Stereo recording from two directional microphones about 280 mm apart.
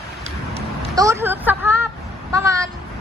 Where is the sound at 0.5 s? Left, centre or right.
Right.